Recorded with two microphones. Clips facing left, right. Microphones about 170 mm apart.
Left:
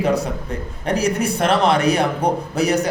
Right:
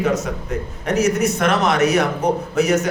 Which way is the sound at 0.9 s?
35° left (ahead or behind).